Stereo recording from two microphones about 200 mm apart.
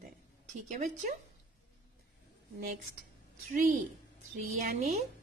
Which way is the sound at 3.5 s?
40° right (ahead or behind).